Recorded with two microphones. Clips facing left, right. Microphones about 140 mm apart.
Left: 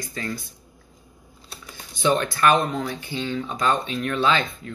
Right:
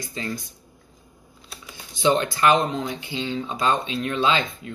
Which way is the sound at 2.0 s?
20° right (ahead or behind).